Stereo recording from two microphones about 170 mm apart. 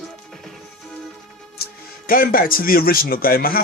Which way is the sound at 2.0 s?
60° left (ahead or behind).